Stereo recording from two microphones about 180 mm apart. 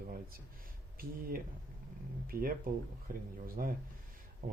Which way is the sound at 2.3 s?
55° right (ahead or behind).